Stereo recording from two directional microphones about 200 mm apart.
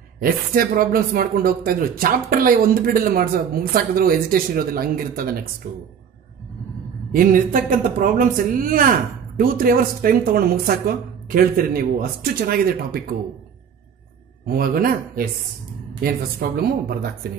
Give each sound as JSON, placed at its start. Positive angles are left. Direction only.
{"t": 0.2, "sound": "speech", "side_deg": -45}
{"t": 7.1, "sound": "speech", "side_deg": -45}
{"t": 14.4, "sound": "speech", "side_deg": -45}